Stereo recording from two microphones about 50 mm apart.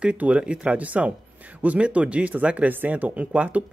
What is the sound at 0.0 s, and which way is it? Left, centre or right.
Speech, right.